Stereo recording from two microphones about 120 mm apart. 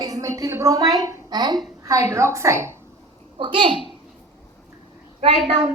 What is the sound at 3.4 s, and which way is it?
Speech, 45° right (ahead or behind).